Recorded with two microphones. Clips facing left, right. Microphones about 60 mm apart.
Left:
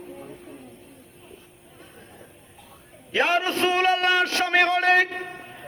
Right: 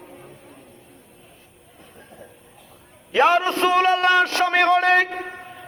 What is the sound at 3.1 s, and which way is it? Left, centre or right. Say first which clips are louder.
A man's voice: right 5 dB; right.